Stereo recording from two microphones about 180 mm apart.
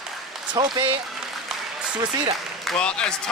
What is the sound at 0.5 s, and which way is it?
Speech, 25° right (ahead or behind).